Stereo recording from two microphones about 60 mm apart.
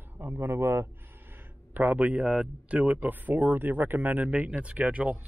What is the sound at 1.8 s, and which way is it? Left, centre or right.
Speech, right.